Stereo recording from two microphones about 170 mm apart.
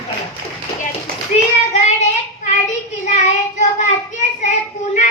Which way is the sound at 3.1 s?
45° left (ahead or behind).